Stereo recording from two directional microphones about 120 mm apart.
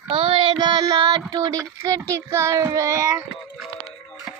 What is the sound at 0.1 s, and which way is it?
Child singing, 45° right (ahead or behind).